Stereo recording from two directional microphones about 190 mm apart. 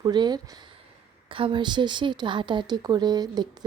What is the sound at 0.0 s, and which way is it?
A woman's voice, 20° right (ahead or behind).